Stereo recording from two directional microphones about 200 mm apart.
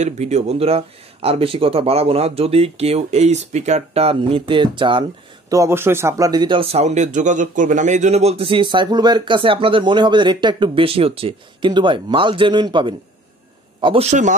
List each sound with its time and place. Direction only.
0.0 s speech: 35° right (ahead or behind)
5.5 s a man's voice: 15° right (ahead or behind)